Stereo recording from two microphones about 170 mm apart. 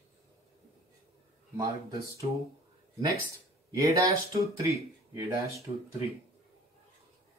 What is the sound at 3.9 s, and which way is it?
Speech, 20° right (ahead or behind).